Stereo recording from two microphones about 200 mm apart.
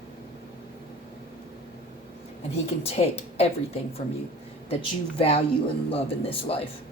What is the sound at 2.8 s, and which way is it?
A woman's voice, 30° left (ahead or behind).